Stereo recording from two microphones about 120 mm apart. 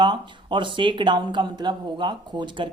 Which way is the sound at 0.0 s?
40° right (ahead or behind).